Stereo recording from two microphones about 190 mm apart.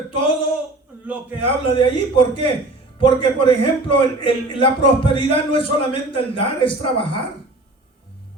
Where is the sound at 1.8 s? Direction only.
25° left (ahead or behind).